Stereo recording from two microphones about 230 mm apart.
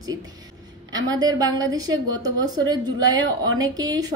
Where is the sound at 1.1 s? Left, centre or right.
Centre.